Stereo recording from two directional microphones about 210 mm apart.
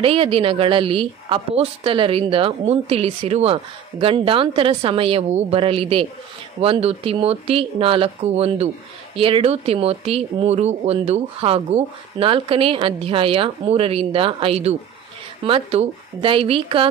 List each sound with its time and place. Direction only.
0.0 s speech: 25° right (ahead or behind)